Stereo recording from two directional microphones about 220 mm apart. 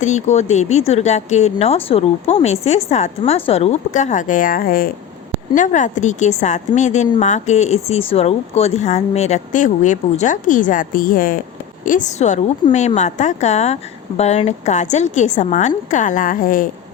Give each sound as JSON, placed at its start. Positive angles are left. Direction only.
{"t": 0.0, "sound": "speech", "side_deg": 30}